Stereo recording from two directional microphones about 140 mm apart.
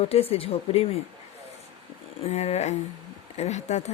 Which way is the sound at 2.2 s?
50° left (ahead or behind).